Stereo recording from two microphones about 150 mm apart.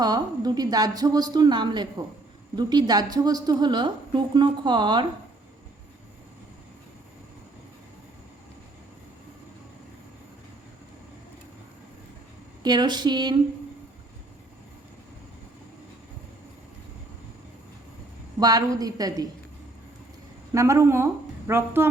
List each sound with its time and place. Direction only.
0.0 s a woman's voice: 25° right (ahead or behind)
12.6 s a woman's voice: 30° right (ahead or behind)
18.3 s a woman's voice: 25° right (ahead or behind)
20.5 s a woman's voice: 20° right (ahead or behind)